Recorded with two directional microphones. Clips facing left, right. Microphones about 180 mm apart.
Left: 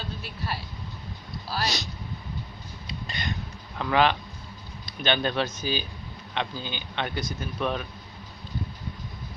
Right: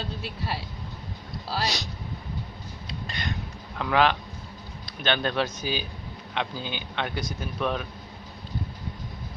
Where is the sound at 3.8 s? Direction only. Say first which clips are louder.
Even; centre (ahead or behind).